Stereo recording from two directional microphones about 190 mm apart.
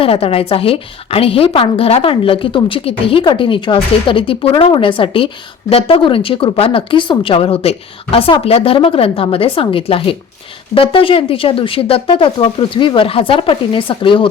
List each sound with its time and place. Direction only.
0.0 s a woman's voice: 30° left (ahead or behind)